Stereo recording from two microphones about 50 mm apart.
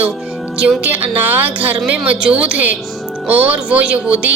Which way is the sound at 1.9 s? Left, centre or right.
Right.